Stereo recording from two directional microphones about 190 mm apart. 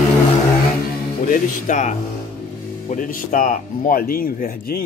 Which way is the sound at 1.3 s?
40° left (ahead or behind).